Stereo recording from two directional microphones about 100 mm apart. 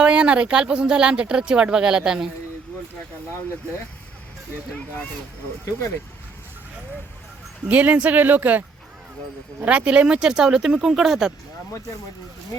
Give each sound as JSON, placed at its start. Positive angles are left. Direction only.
{"t": 0.0, "sound": "speech", "side_deg": -10}
{"t": 7.7, "sound": "speech", "side_deg": -15}
{"t": 9.6, "sound": "speech", "side_deg": -10}